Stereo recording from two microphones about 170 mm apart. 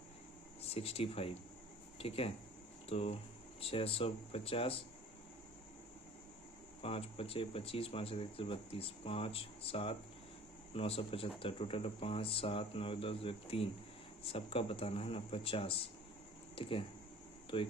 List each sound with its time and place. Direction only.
0.6 s speech: 35° left (ahead or behind)
6.8 s speech: 35° left (ahead or behind)